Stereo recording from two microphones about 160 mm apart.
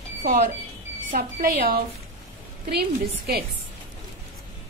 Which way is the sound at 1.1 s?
75° right (ahead or behind).